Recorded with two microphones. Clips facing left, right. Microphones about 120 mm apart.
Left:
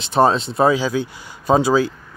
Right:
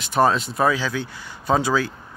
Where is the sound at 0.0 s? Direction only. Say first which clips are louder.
Left 3 dB; 25° left (ahead or behind).